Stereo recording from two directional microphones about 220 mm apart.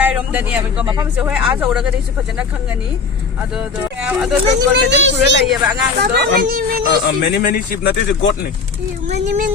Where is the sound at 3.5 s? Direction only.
5° right (ahead or behind).